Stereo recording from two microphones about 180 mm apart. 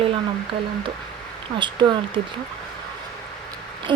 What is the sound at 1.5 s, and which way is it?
Speech, 25° right (ahead or behind).